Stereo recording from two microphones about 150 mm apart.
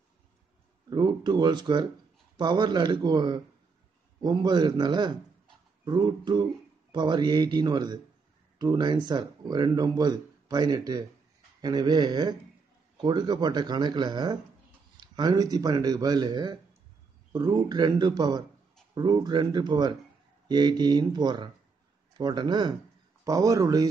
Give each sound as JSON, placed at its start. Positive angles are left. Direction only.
{"t": 0.8, "sound": "speech", "side_deg": -30}